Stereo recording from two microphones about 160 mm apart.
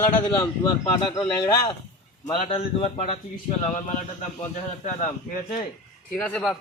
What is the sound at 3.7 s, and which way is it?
Speech, 50° left (ahead or behind).